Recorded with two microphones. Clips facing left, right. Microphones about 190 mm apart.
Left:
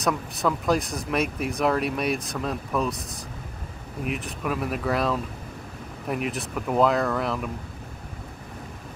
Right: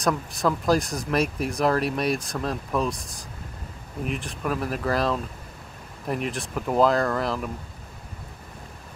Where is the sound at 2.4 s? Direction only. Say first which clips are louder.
Even; 5° left (ahead or behind).